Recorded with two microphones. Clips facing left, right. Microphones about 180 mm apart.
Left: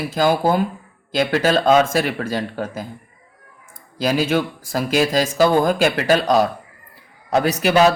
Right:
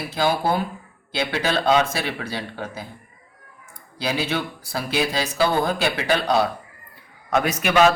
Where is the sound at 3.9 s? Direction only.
40° left (ahead or behind).